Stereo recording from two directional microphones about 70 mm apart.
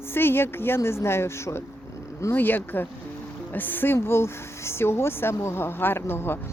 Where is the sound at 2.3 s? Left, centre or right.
Left.